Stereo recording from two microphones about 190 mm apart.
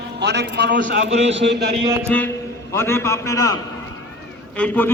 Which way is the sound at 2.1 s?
5° left (ahead or behind).